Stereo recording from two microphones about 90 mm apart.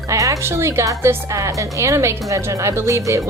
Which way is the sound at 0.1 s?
35° right (ahead or behind).